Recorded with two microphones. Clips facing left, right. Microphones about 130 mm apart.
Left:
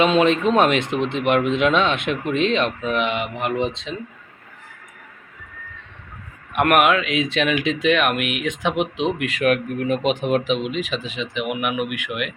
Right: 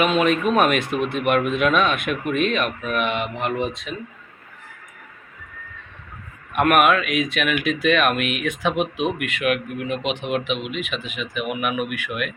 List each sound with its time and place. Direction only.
0.0 s speech: 25° left (ahead or behind)
6.5 s speech: 15° left (ahead or behind)
9.2 s speech: 35° left (ahead or behind)
11.3 s speech: 15° left (ahead or behind)